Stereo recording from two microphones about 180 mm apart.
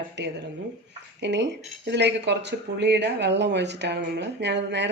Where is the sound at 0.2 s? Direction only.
75° right (ahead or behind).